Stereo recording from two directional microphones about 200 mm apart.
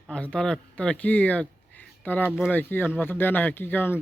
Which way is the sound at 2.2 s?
5° right (ahead or behind).